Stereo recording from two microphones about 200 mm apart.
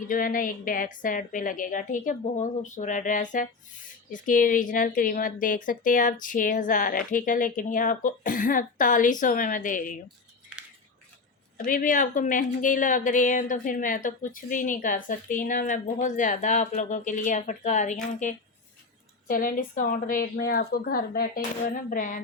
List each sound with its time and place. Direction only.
0.1 s a woman's voice: 40° left (ahead or behind)
11.5 s a woman's voice: 45° left (ahead or behind)